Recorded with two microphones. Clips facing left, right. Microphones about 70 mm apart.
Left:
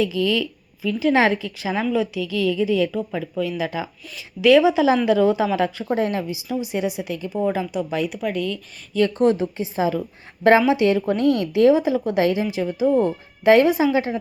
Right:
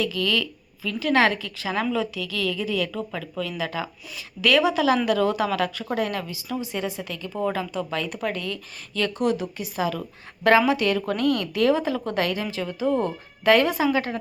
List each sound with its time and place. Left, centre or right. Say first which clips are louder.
0.0 s speech: left 4 dB; centre
8.1 s speech: left 4 dB; centre
8.9 s speech: left 7 dB; left
9.1 s speech: left 6 dB; left